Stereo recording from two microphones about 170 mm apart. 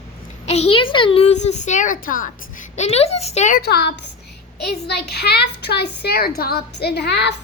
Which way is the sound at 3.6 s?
70° left (ahead or behind).